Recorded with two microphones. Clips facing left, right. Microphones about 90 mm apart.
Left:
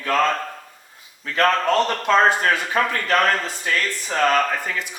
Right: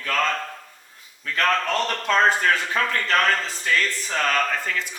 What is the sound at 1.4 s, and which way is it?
Speech, 25° left (ahead or behind).